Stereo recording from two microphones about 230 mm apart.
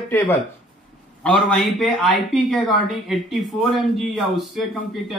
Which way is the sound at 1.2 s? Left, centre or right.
Centre.